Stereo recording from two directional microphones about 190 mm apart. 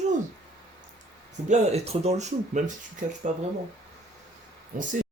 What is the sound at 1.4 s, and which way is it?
Speech, 40° right (ahead or behind).